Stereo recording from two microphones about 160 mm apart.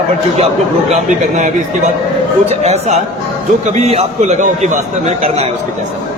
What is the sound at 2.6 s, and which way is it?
A man's voice, 45° right (ahead or behind).